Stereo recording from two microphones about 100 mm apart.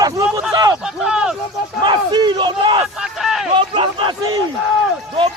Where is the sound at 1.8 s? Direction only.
50° right (ahead or behind).